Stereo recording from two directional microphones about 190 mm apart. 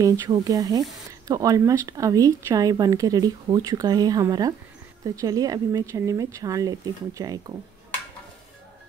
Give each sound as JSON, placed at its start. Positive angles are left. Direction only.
{"t": 0.0, "sound": "speech", "side_deg": -20}